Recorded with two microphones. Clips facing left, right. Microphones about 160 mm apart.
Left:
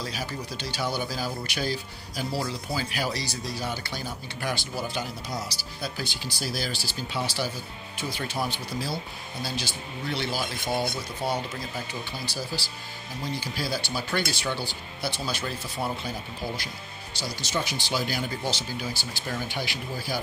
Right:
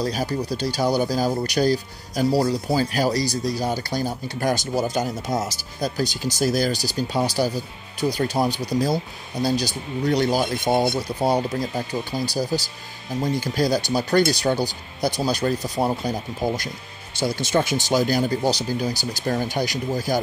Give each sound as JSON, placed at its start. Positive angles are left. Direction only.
{"t": 0.0, "sound": "speech", "side_deg": -40}
{"t": 17.1, "sound": "speech", "side_deg": -50}